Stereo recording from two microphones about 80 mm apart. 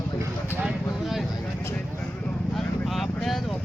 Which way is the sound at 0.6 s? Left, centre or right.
Centre.